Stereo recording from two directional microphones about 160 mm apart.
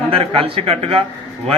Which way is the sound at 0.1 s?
35° right (ahead or behind).